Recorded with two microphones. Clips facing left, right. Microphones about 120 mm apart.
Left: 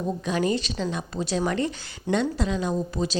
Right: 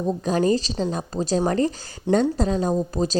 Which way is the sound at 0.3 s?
35° right (ahead or behind).